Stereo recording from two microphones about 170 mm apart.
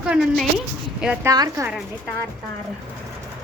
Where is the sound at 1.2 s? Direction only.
20° right (ahead or behind).